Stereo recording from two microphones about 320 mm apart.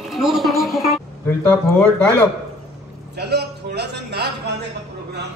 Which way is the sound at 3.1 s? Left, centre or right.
Right.